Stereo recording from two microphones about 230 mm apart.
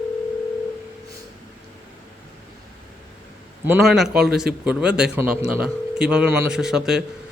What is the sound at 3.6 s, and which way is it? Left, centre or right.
A man's voice, centre.